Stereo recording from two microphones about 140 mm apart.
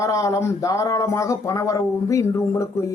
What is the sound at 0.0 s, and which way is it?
Speech, 25° left (ahead or behind).